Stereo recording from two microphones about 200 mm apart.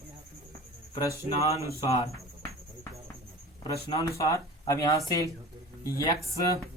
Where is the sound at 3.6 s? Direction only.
20° left (ahead or behind).